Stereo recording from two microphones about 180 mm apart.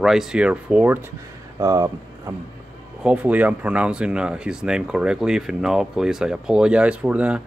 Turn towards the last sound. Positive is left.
turn(degrees=-5)  # may be behind; listen again after turning